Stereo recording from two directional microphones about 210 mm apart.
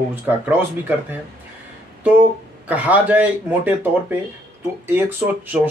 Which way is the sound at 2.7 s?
5° right (ahead or behind).